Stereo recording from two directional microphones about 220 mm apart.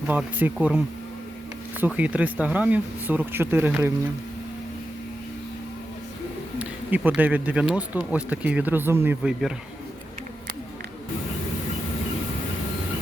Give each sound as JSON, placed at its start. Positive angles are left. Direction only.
{"t": 0.1, "sound": "speech", "side_deg": -10}
{"t": 1.8, "sound": "speech", "side_deg": -5}
{"t": 6.6, "sound": "speech", "side_deg": -5}